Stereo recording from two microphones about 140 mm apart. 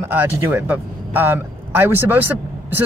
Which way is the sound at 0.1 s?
15° right (ahead or behind).